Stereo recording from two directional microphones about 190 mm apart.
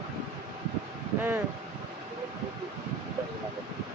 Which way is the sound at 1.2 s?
10° right (ahead or behind).